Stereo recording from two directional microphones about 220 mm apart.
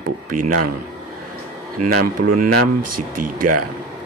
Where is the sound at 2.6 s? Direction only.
90° right.